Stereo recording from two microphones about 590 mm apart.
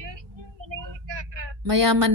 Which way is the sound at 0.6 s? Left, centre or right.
Right.